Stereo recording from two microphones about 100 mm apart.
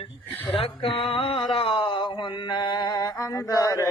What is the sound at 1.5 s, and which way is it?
Mantra, 65° left (ahead or behind).